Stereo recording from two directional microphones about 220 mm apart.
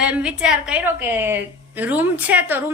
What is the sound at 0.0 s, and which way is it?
A woman's voice, 5° right (ahead or behind).